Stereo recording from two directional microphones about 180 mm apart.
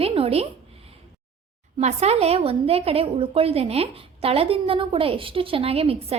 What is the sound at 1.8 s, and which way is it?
A woman's voice, 35° right (ahead or behind).